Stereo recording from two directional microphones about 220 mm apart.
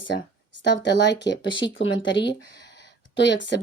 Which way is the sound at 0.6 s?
55° left (ahead or behind).